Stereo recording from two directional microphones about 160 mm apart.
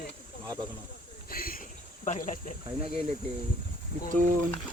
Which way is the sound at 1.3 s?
65° left (ahead or behind).